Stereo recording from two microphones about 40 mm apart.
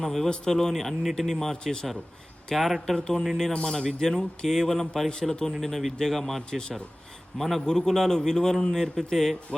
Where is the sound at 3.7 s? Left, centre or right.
Centre.